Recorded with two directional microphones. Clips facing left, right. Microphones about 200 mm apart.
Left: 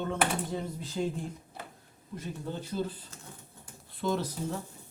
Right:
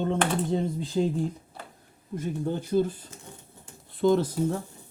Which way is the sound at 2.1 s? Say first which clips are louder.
Right 8 dB; 50° right (ahead or behind).